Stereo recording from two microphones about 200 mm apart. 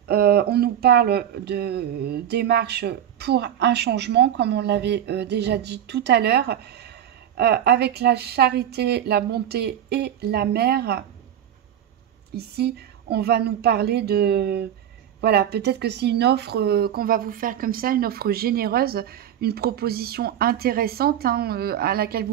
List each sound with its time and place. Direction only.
0.1 s speech: 55° right (ahead or behind)
12.4 s speech: 55° right (ahead or behind)